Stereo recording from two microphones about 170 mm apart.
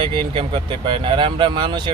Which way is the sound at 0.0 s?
30° right (ahead or behind).